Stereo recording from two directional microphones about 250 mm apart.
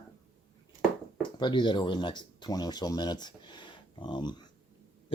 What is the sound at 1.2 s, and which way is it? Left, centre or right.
Speech, centre.